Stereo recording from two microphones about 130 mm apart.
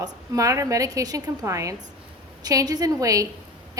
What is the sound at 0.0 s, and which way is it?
A woman's voice, 25° right (ahead or behind).